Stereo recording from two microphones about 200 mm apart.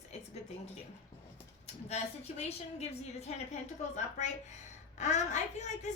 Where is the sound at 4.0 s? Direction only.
35° left (ahead or behind).